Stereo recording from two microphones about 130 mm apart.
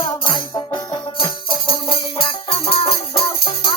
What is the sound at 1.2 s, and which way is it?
Music, 40° left (ahead or behind).